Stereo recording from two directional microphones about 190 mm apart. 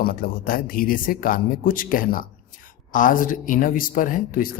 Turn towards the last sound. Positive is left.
turn(degrees=50)  # may be behind; listen again after turning